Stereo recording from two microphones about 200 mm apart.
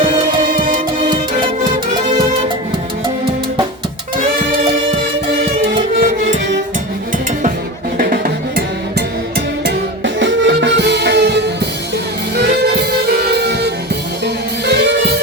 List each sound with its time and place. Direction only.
0.0 s music: 25° right (ahead or behind)
1.9 s music: 40° right (ahead or behind)
6.0 s music: 45° right (ahead or behind)
7.9 s music: 45° right (ahead or behind)
9.6 s music: 65° right (ahead or behind)
14.7 s music: 60° right (ahead or behind)